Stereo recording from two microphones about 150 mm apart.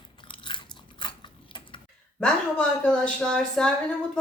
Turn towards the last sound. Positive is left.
turn(degrees=5)  # may be behind; listen again after turning